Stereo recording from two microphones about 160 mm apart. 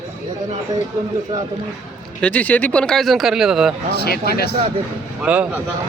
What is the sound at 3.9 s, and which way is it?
Speech, 85° left.